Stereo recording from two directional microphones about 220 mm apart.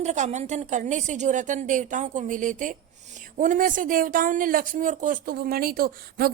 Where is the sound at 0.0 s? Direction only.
30° right (ahead or behind).